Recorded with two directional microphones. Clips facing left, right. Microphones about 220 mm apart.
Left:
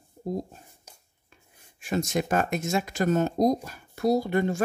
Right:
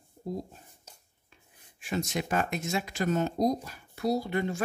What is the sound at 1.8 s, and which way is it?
Speech, 45° left (ahead or behind).